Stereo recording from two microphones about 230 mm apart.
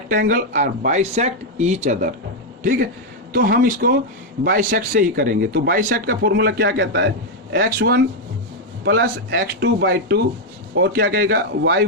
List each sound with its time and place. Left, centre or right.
0.1 s speech: right
3.3 s speech: right